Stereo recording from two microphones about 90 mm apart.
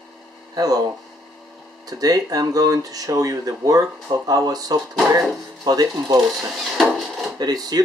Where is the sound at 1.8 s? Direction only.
45° right (ahead or behind).